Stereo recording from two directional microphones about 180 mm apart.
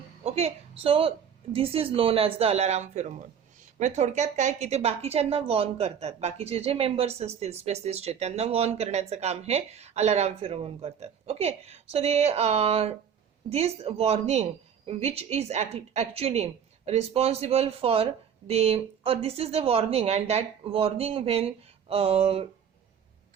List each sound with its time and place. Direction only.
0.3 s a woman's voice: 35° right (ahead or behind)